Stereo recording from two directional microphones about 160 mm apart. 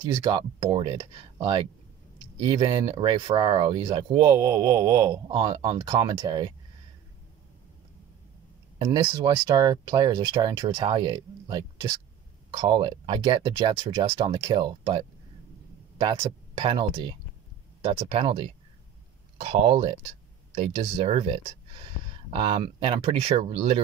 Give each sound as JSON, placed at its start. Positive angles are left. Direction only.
{"t": 0.2, "sound": "speech", "side_deg": -30}
{"t": 8.7, "sound": "speech", "side_deg": -25}